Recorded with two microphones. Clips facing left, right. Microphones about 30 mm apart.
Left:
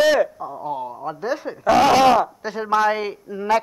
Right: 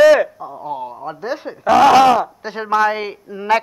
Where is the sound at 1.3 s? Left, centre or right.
Right.